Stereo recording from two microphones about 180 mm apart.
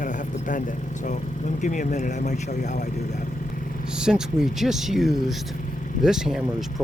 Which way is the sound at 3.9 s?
5° right (ahead or behind).